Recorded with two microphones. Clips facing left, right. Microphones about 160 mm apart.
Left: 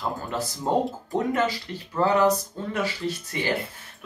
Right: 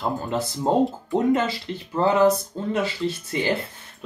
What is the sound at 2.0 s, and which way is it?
Speech, 25° right (ahead or behind).